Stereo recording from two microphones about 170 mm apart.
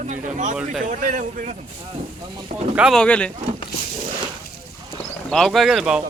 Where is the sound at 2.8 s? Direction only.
Centre (ahead or behind).